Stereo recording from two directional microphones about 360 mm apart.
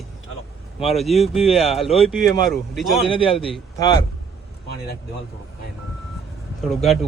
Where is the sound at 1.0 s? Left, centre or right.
Centre.